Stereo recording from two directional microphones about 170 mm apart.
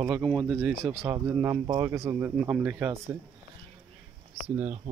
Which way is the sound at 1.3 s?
15° right (ahead or behind).